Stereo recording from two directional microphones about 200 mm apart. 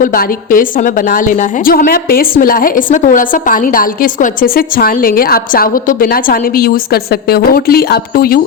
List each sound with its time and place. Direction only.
0.0 s a woman's voice: 45° left (ahead or behind)